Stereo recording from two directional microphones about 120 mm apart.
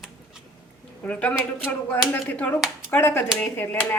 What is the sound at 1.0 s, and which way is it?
A woman's voice, 10° left (ahead or behind).